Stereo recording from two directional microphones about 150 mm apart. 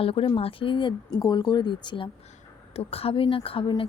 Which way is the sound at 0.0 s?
35° left (ahead or behind).